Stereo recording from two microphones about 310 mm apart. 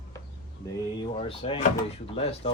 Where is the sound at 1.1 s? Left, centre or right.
Centre.